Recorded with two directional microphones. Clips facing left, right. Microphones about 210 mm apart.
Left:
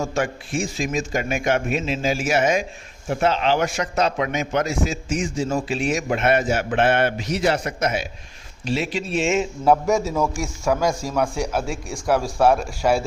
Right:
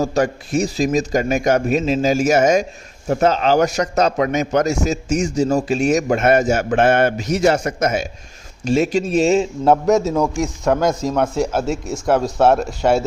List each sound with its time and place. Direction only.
0.0 s a man's voice: 40° right (ahead or behind)
9.9 s speech: 20° right (ahead or behind)